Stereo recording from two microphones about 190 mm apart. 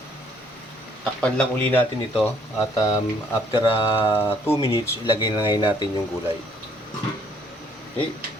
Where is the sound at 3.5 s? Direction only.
30° left (ahead or behind).